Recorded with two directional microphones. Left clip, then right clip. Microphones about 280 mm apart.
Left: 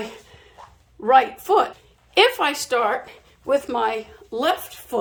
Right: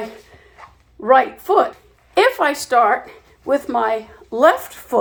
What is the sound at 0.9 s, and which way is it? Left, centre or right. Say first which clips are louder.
Speech: right 2 dB; centre.